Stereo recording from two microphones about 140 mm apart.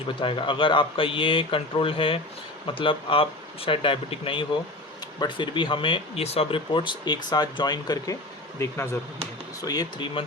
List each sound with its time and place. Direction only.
0.2 s speech: 40° left (ahead or behind)